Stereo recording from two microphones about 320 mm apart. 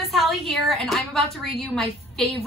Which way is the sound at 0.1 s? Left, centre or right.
Centre.